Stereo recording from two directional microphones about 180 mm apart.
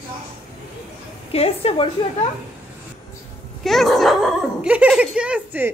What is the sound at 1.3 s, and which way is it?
Dishes, 35° left (ahead or behind).